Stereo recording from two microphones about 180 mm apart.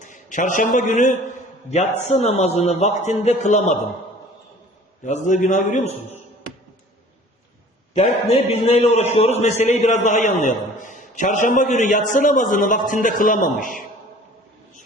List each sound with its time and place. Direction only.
0.0 s a man's voice: 45° left (ahead or behind)
5.0 s a man's voice: 45° left (ahead or behind)
7.9 s a man's voice: 40° left (ahead or behind)